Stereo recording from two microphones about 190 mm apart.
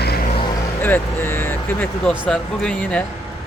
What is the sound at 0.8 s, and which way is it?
Speech, 10° left (ahead or behind).